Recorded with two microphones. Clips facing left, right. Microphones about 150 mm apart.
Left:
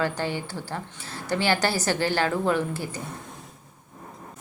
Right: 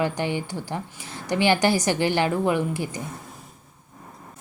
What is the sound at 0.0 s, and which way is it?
A woman's voice, 15° right (ahead or behind).